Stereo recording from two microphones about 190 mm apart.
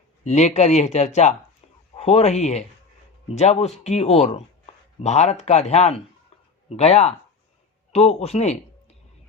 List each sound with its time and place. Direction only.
0.3 s a man's voice: 35° left (ahead or behind)